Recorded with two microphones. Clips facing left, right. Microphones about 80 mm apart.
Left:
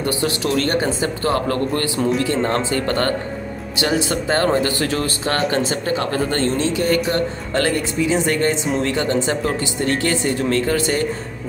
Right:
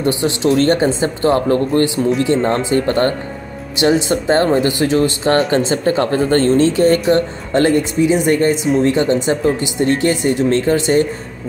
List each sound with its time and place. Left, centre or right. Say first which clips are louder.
0.0 s speech: right 5 dB; right